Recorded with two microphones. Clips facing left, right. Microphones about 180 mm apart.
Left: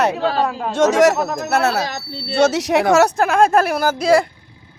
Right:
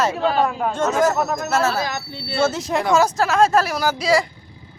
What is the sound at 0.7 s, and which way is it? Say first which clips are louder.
Speech: left 5 dB; 80° left.